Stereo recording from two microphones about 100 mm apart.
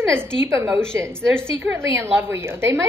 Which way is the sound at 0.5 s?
25° right (ahead or behind).